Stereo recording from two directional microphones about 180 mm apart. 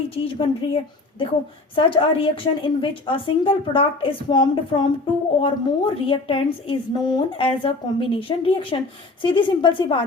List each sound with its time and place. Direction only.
0.2 s a woman's voice: 30° left (ahead or behind)